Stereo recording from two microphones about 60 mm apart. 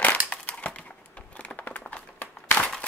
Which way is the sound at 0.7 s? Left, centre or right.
Left.